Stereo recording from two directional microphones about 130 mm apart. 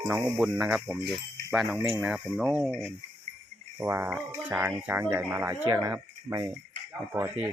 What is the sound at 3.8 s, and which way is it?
Speech, 10° right (ahead or behind).